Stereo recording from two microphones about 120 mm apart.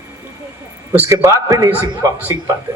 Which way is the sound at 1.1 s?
30° right (ahead or behind).